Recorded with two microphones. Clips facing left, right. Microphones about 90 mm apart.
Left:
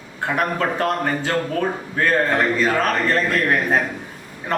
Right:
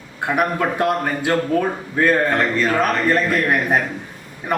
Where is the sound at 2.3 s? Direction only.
Centre (ahead or behind).